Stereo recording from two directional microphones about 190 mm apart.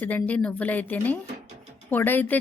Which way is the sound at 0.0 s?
10° left (ahead or behind).